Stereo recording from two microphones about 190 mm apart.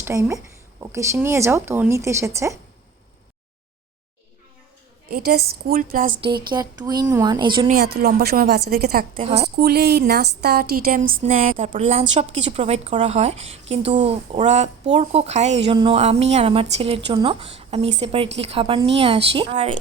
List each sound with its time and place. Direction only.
0.0 s speech: 15° right (ahead or behind)
5.1 s a woman's voice: 55° right (ahead or behind)
6.5 s speech: 20° right (ahead or behind)
7.7 s a woman's voice: 55° right (ahead or behind); by 19.7 s 30° right (ahead or behind)